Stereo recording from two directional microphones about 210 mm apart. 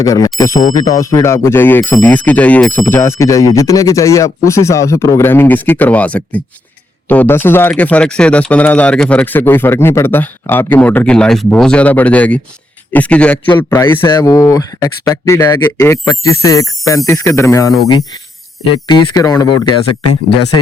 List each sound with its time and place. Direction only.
0.0 s speech: 15° left (ahead or behind)
19.1 s speech: 20° left (ahead or behind)